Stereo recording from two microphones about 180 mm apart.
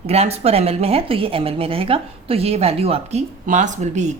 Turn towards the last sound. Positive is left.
turn(degrees=-40)  # may be behind; listen again after turning